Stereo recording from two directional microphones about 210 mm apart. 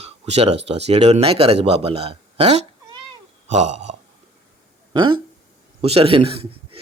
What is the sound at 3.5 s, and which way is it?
Burping, 35° right (ahead or behind).